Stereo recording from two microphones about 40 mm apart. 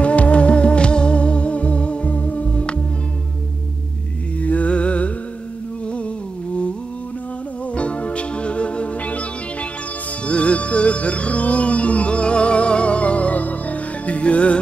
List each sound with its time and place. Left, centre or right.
0.0 s music: left
4.4 s music: left
7.7 s music: left
10.2 s music: left